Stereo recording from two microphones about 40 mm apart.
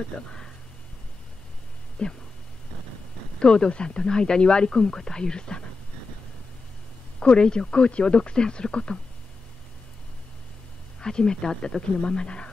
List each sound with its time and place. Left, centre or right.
0.1 s speech: left
2.0 s speech: left
3.3 s speech: left
7.2 s speech: left
11.0 s speech: centre